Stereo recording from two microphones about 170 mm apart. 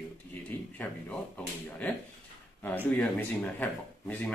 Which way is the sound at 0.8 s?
10° left (ahead or behind).